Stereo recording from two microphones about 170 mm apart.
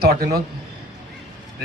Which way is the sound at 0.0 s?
65° right (ahead or behind).